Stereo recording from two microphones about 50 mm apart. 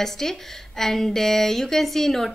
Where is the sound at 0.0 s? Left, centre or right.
Centre.